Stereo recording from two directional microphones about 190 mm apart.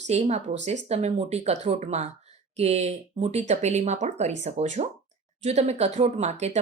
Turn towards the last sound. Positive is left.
turn(degrees=-35)  # may be behind; listen again after turning